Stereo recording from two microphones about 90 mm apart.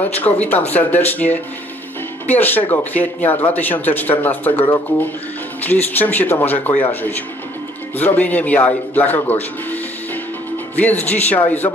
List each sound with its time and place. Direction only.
0.2 s speech: 20° left (ahead or behind)
10.8 s speech: 15° left (ahead or behind)